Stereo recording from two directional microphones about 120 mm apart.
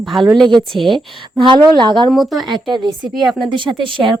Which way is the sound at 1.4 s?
40° right (ahead or behind).